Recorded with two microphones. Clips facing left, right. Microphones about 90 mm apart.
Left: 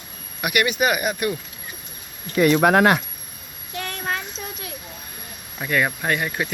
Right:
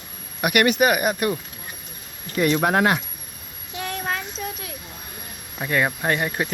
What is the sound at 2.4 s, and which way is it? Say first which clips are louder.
Speech: left 4 dB; 85° left.